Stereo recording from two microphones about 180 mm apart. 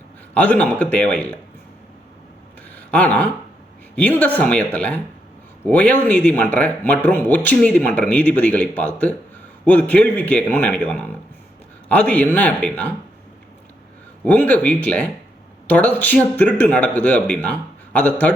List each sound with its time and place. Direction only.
0.3 s speech: 10° left (ahead or behind)
2.7 s a sound: 10° left (ahead or behind)
3.9 s speech: 10° left (ahead or behind)
14.3 s speech: 10° left (ahead or behind)